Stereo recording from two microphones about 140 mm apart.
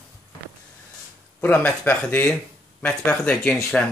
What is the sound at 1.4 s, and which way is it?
Speech, 10° left (ahead or behind).